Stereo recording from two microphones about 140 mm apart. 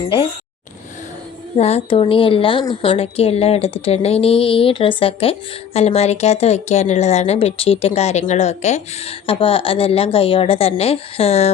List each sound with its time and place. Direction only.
1.5 s a woman's voice: 50° left (ahead or behind)